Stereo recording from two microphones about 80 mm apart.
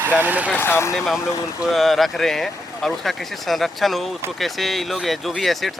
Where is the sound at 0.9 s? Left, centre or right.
Centre.